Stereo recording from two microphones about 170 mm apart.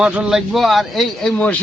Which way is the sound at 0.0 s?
5° right (ahead or behind).